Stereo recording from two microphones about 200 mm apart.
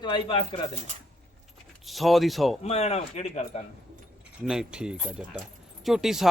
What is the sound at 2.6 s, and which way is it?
Speech, 30° left (ahead or behind).